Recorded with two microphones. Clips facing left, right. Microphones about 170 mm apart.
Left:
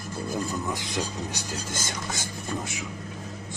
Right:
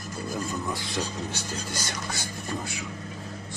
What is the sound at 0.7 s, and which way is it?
Speech, 15° left (ahead or behind).